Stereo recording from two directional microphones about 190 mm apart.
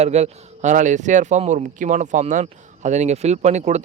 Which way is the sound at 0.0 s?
35° right (ahead or behind).